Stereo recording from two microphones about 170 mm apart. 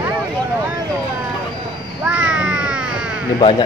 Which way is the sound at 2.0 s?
5° right (ahead or behind).